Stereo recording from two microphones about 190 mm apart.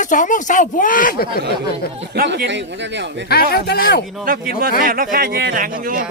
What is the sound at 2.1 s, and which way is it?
Speech, 55° right (ahead or behind).